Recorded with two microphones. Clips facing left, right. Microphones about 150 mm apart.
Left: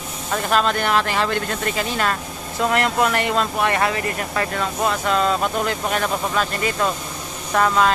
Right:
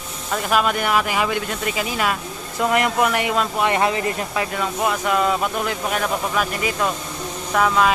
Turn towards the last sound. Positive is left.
turn(degrees=0)  # may be behind; listen again after turning